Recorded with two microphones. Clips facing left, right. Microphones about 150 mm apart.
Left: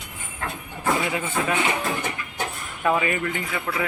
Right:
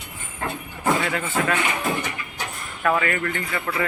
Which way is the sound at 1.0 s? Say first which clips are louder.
Right 1 dB; 15° left (ahead or behind).